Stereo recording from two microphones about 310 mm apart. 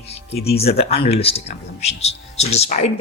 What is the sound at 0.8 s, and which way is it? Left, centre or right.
Speech, centre.